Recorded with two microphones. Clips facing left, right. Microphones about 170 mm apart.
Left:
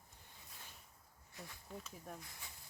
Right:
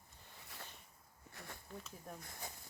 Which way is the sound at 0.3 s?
75° right (ahead or behind).